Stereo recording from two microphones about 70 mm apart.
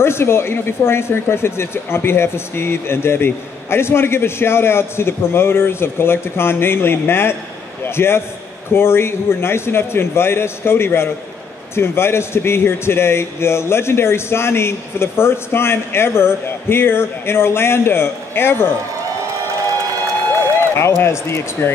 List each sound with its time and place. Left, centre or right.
0.0 s speech: left
20.7 s speech: left